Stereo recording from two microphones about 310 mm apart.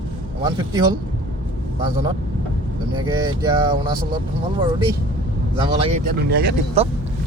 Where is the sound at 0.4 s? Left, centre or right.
Centre.